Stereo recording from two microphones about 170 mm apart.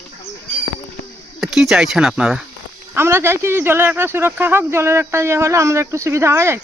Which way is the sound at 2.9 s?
15° right (ahead or behind).